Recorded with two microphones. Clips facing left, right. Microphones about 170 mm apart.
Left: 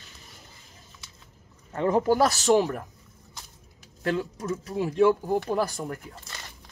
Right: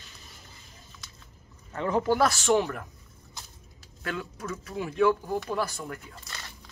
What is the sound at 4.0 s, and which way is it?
Speech, 35° left (ahead or behind).